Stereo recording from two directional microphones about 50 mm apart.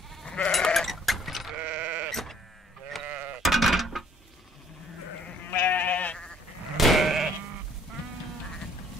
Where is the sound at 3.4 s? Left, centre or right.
Centre.